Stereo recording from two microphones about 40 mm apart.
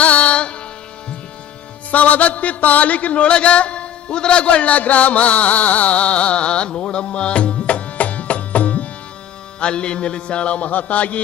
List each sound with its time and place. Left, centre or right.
0.0 s music: left
1.9 s a sound: left
9.6 s music: left